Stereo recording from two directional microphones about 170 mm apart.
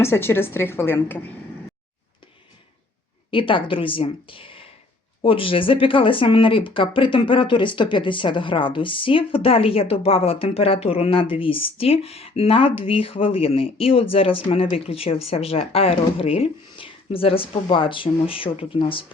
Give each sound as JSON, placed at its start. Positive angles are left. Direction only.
{"t": 0.0, "sound": "a woman's voice", "side_deg": 15}
{"t": 3.3, "sound": "speech", "side_deg": 30}